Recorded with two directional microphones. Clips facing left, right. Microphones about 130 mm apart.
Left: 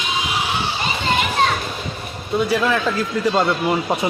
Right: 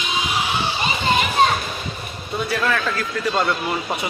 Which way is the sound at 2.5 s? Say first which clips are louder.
Left 1 dB; 10° left (ahead or behind).